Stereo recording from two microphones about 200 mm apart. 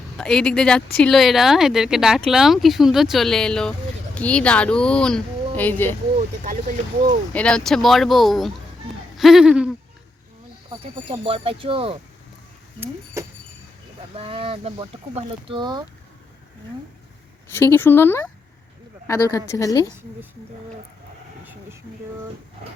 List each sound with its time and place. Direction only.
0.2 s a woman's voice: 5° left (ahead or behind)
6.1 s speech: 40° right (ahead or behind)
7.3 s speech: 5° left (ahead or behind)
10.7 s speech: 30° right (ahead or behind)
13.2 s a sound: 15° right (ahead or behind)
14.2 s speech: 30° right (ahead or behind)
17.5 s a woman's voice: 10° left (ahead or behind)